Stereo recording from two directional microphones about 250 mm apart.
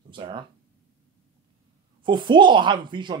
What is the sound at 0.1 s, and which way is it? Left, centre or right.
Speech, centre.